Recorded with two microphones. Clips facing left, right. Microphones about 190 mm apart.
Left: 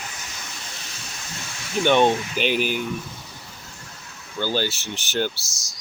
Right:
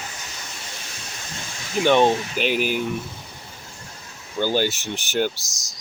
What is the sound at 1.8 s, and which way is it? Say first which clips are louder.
Speech: right 1 dB; 5° right (ahead or behind).